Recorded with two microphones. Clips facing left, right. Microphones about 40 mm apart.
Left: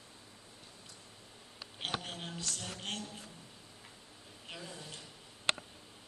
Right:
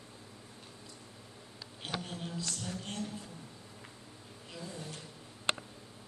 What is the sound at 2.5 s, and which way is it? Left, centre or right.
Speech, left.